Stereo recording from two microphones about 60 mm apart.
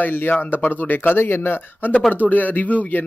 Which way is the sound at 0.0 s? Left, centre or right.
Left.